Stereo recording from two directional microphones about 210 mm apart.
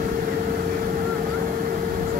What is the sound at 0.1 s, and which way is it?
Vehicle, 40° right (ahead or behind).